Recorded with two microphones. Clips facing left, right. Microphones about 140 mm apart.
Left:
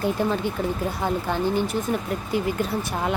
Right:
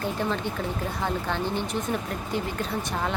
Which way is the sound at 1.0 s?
10° left (ahead or behind).